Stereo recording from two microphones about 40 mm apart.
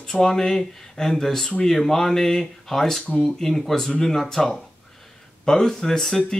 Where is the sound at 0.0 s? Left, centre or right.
Centre.